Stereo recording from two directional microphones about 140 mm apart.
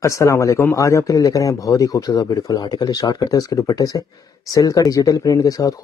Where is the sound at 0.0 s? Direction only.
20° left (ahead or behind).